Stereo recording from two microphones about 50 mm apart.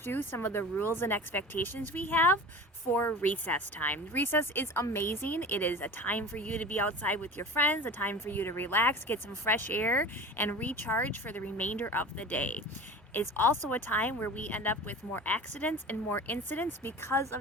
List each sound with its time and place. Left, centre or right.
0.0 s a woman's voice: left
17.0 s a woman's voice: left